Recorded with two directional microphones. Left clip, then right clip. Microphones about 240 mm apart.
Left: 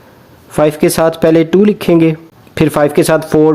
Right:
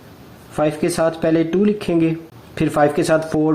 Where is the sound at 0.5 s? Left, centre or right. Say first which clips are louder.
Left 8 dB; left.